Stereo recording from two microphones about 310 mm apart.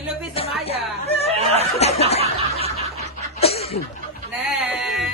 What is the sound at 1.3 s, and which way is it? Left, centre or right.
Snicker, centre.